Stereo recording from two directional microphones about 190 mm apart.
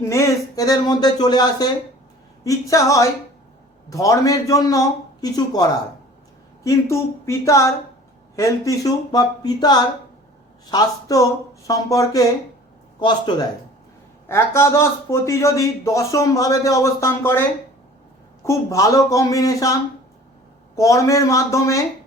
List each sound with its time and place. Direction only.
0.0 s a man's voice: 15° left (ahead or behind)
6.7 s a man's voice: 15° left (ahead or behind)
14.3 s a man's voice: 15° left (ahead or behind)
18.4 s a man's voice: 15° left (ahead or behind)